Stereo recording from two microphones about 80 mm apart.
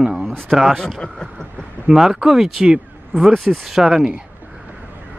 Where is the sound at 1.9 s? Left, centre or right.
Centre.